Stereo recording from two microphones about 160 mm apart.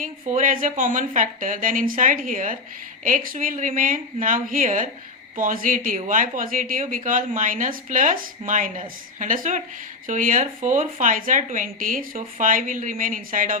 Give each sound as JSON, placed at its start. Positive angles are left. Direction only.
{"t": 0.0, "sound": "speech", "side_deg": -55}